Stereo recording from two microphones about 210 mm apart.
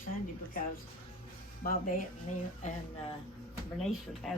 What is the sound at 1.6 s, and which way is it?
Speech, 40° left (ahead or behind).